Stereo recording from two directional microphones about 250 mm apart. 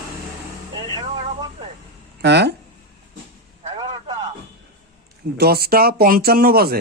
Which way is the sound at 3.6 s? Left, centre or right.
Centre.